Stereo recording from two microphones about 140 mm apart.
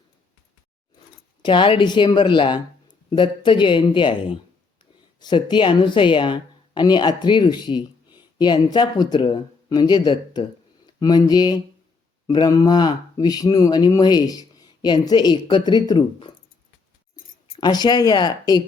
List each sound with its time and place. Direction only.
1.5 s speech: 35° left (ahead or behind)
17.6 s speech: 30° left (ahead or behind)